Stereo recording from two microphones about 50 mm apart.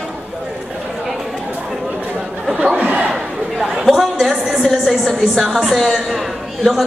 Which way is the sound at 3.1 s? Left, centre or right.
Centre.